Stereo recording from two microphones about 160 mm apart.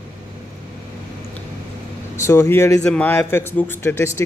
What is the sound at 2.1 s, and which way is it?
Speech, 15° left (ahead or behind).